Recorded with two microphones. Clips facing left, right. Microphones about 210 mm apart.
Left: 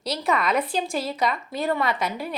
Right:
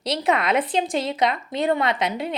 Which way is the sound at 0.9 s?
20° right (ahead or behind).